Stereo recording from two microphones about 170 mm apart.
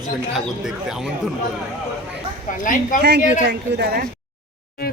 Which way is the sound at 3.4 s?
75° right (ahead or behind).